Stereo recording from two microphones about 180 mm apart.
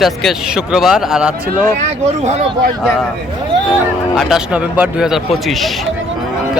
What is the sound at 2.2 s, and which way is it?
Speech, 40° right (ahead or behind).